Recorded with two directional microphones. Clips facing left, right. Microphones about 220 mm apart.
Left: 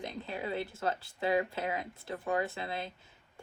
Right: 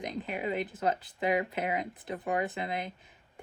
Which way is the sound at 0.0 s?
15° right (ahead or behind).